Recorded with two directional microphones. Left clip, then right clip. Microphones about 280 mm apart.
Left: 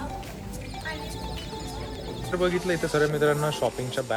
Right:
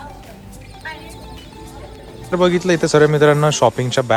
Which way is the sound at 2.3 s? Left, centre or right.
Centre.